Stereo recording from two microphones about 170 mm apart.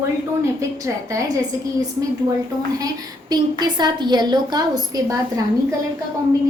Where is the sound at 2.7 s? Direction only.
20° right (ahead or behind).